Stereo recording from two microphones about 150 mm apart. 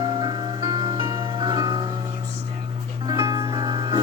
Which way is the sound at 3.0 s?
25° right (ahead or behind).